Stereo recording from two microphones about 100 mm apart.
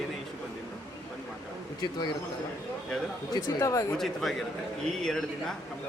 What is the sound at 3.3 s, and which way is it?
Speech, 35° left (ahead or behind).